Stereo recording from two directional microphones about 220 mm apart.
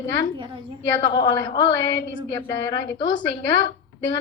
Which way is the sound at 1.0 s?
20° left (ahead or behind).